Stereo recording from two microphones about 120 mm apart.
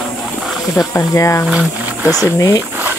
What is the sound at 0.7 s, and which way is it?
Speech, 25° left (ahead or behind).